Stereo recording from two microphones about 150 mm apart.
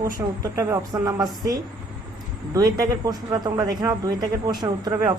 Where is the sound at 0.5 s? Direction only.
20° right (ahead or behind).